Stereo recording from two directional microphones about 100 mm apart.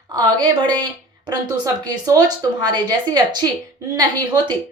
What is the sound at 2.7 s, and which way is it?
Speech, 45° right (ahead or behind).